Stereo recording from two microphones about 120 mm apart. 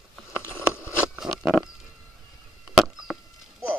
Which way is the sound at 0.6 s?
20° left (ahead or behind).